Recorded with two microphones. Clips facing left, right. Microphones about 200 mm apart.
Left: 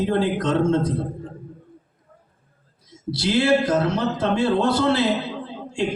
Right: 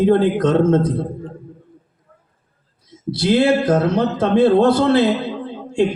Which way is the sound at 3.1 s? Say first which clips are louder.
Right 4 dB; 55° right (ahead or behind).